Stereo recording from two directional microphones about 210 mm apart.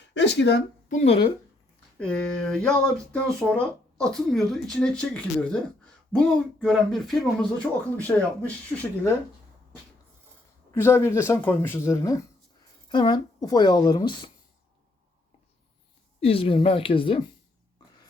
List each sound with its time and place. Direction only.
0.1 s speech: 55° left (ahead or behind)
0.9 s a woman's voice: 30° left (ahead or behind)
2.0 s speech: 5° left (ahead or behind)
10.8 s a woman's voice: 10° left (ahead or behind)
16.2 s a woman's voice: 25° left (ahead or behind)